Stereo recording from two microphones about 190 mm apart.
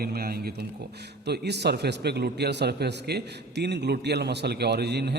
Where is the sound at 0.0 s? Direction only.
55° right (ahead or behind).